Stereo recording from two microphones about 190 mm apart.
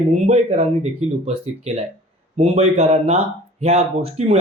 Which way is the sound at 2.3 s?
35° right (ahead or behind).